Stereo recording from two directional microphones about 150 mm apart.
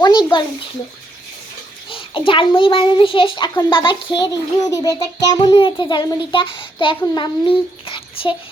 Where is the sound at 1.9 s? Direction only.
35° left (ahead or behind).